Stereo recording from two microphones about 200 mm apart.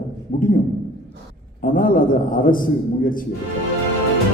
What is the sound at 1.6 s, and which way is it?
A man's voice, 45° left (ahead or behind).